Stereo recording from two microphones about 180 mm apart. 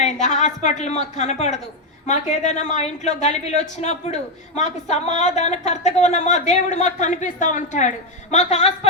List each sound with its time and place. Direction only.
0.0 s speech: 40° left (ahead or behind)